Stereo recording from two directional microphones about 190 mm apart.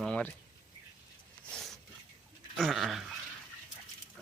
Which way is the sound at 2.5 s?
Centre (ahead or behind).